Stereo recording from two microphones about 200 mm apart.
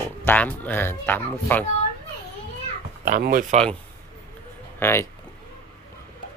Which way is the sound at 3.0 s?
45° right (ahead or behind).